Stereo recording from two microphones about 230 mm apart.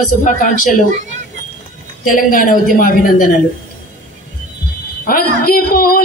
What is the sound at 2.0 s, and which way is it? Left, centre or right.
A woman's voice, left.